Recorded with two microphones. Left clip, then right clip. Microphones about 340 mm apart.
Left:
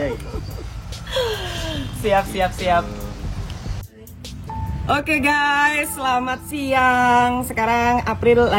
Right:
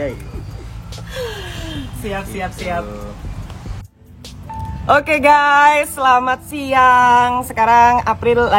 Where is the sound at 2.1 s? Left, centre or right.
Centre.